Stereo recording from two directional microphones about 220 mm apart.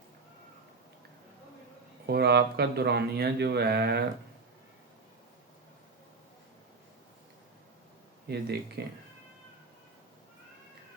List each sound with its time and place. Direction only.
2.0 s speech: 45° right (ahead or behind)
8.3 s speech: 45° right (ahead or behind)